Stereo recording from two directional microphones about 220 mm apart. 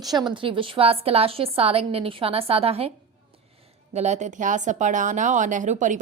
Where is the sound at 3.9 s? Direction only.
30° right (ahead or behind).